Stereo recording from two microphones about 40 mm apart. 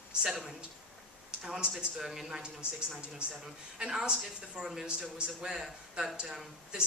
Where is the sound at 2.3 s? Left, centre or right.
Centre.